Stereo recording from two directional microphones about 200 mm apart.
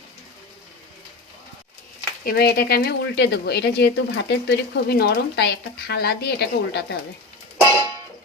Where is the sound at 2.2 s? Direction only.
50° left (ahead or behind).